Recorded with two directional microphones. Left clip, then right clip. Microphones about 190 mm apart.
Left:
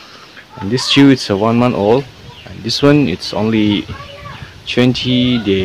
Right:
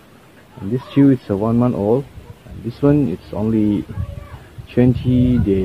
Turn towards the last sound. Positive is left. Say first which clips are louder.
# left 3 dB
turn(degrees=10)  # may be behind; listen again after turning